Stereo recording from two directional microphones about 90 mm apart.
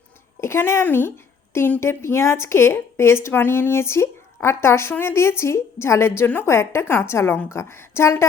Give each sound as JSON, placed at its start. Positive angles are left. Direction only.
{"t": 0.4, "sound": "a woman's voice", "side_deg": 30}